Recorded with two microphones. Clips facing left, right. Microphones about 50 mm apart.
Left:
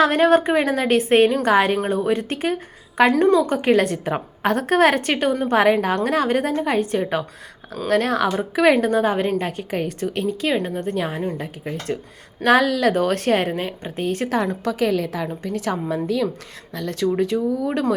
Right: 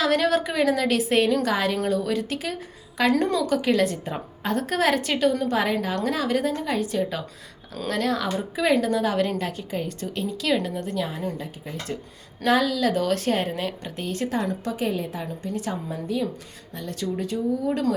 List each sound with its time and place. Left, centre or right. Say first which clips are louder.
0.0 s a woman's voice: left 6 dB; left
8.4 s speech: left 6 dB; left
8.8 s a woman's voice: left 5 dB; left
9.5 s a woman's voice: left 5 dB; left
10.4 s a woman's voice: even; left
13.6 s a woman's voice: left 3 dB; left
14.0 s a woman's voice: left 5 dB; left
14.3 s a woman's voice: left 5 dB; left
16.7 s speech: left 8 dB; left